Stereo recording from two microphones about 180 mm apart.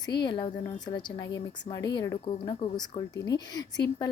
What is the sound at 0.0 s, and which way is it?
Speech, 25° left (ahead or behind).